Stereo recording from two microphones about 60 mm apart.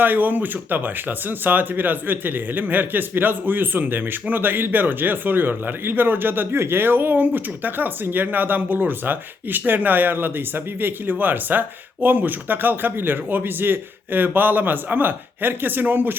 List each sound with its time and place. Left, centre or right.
0.0 s speech: right